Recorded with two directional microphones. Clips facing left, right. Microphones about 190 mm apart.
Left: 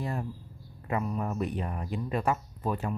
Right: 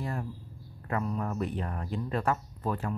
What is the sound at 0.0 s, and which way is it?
Speech, 20° left (ahead or behind).